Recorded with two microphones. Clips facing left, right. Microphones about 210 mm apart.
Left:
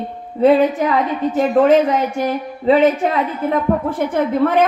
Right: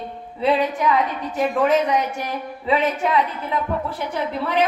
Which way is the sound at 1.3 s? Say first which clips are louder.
Left 6 dB; 40° left (ahead or behind).